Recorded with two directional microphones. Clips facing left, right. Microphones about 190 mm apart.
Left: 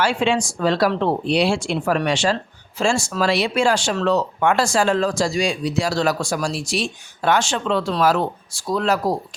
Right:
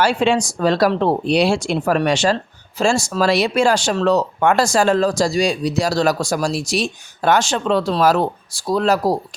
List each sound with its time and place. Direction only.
0.0 s speech: 40° right (ahead or behind)